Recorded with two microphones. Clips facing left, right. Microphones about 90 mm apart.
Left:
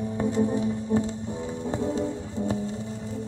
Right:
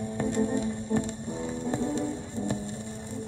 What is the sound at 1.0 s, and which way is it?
Music, 20° left (ahead or behind).